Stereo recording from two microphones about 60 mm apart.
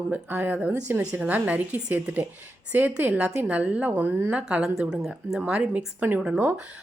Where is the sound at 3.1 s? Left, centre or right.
Centre.